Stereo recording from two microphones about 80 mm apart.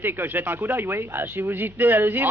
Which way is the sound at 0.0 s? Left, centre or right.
Right.